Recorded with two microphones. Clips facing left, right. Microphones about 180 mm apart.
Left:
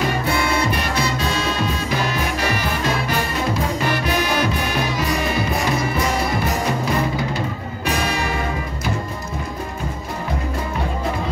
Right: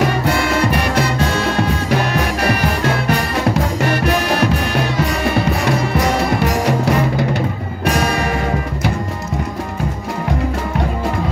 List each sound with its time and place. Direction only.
0.9 s music: 65° right (ahead or behind)
5.7 s music: 75° right (ahead or behind)